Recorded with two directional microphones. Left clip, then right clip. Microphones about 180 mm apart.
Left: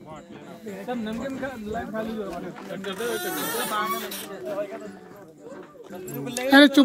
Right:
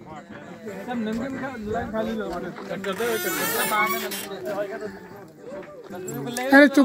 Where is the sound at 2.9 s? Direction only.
60° right (ahead or behind).